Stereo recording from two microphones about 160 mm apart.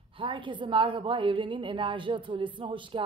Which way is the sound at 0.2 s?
30° right (ahead or behind).